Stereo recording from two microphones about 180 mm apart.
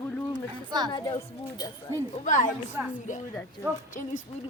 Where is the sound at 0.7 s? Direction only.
25° right (ahead or behind).